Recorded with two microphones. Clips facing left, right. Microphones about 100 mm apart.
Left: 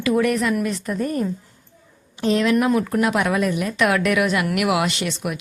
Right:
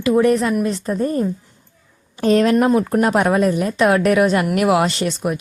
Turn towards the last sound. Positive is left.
turn(degrees=-35)  # may be behind; listen again after turning